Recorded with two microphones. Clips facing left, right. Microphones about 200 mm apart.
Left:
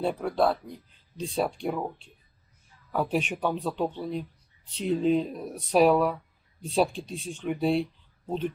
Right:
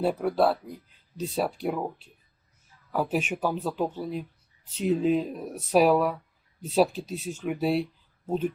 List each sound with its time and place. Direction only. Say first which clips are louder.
0.0 s speech: right 2 dB; 5° right (ahead or behind)